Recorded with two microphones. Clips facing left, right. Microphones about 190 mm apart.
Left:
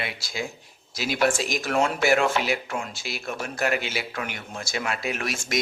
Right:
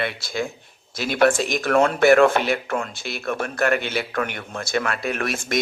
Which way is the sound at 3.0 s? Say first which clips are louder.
Right 3 dB; centre (ahead or behind).